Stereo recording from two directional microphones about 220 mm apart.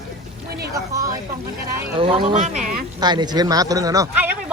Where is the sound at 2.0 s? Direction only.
25° right (ahead or behind).